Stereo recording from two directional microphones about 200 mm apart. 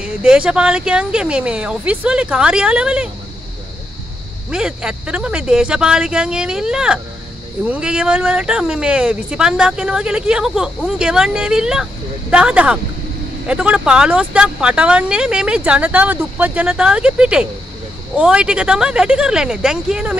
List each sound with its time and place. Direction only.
0.0 s speech: 5° right (ahead or behind)
4.5 s speech: 5° right (ahead or behind)